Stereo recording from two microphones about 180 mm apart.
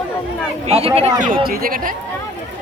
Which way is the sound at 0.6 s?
35° right (ahead or behind).